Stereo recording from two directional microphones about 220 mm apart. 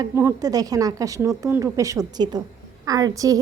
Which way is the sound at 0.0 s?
10° right (ahead or behind).